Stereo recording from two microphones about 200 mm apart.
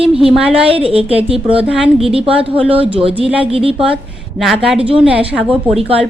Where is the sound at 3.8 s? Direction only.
5° right (ahead or behind).